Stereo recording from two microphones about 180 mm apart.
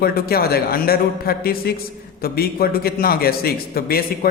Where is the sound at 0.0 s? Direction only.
55° left (ahead or behind).